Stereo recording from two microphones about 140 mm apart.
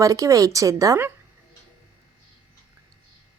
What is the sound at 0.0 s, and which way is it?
A woman's voice, 25° right (ahead or behind).